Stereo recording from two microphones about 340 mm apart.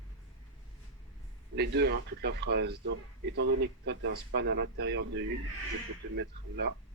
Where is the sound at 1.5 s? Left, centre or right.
Right.